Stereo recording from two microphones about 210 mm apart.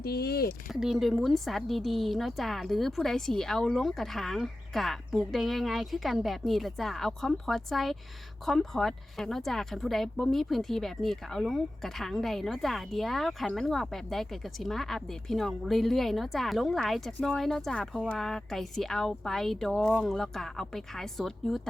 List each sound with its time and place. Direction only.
0.0 s speech: 50° left (ahead or behind)
0.7 s speech: centre (ahead or behind)